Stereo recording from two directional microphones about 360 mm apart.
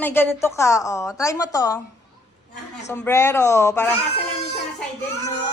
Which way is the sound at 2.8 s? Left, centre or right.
Centre.